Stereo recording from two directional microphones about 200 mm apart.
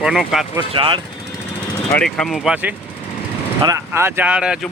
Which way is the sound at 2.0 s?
5° left (ahead or behind).